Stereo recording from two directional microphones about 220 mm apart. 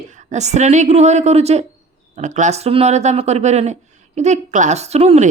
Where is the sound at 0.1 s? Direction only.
35° right (ahead or behind).